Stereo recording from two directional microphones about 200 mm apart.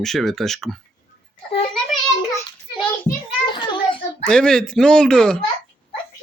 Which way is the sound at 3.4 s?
25° left (ahead or behind).